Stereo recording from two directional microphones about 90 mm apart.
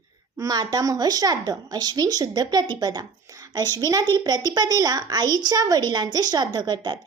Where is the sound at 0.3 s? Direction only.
45° right (ahead or behind).